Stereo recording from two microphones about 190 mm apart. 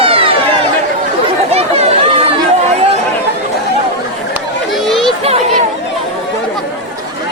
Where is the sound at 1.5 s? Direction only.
30° right (ahead or behind).